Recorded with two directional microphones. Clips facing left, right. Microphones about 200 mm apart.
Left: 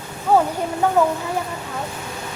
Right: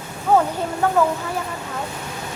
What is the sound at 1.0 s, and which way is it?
Speech, 20° left (ahead or behind).